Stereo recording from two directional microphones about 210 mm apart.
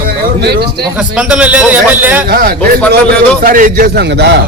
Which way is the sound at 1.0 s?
5° right (ahead or behind).